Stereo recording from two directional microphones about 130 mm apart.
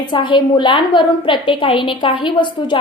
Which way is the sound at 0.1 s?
35° left (ahead or behind).